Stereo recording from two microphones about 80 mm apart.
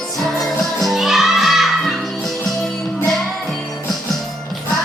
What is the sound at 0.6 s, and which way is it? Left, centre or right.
Music, centre.